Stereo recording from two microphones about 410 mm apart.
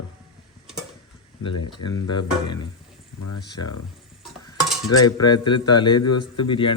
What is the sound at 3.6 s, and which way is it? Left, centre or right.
Speech, left.